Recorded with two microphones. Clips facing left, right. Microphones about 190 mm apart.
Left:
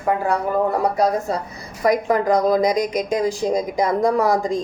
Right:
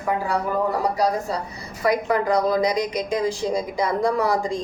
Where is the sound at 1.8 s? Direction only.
45° left (ahead or behind).